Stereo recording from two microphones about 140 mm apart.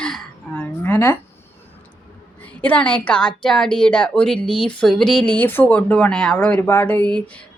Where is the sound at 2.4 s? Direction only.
10° left (ahead or behind).